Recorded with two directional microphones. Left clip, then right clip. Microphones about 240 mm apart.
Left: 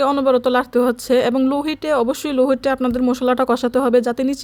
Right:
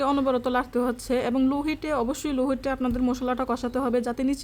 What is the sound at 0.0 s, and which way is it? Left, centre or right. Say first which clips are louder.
Speech: left 8 dB; left.